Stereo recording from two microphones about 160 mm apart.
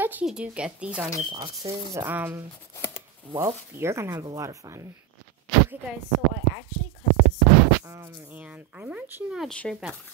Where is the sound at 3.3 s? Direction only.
20° right (ahead or behind).